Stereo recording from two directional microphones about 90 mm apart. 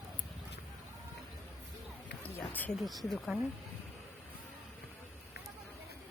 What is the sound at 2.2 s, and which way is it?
Speech, 20° left (ahead or behind).